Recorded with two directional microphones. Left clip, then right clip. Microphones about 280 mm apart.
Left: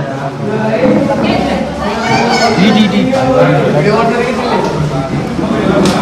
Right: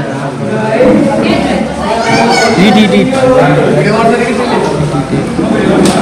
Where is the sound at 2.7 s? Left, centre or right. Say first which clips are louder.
Right 4 dB; left.